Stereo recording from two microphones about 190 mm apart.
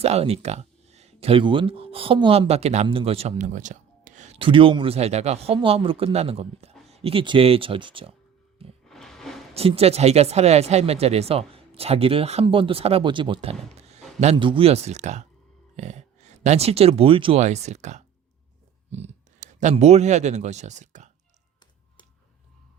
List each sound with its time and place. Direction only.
0.0 s speech: 35° right (ahead or behind)
8.9 s a sound: centre (ahead or behind)
9.6 s speech: 30° right (ahead or behind)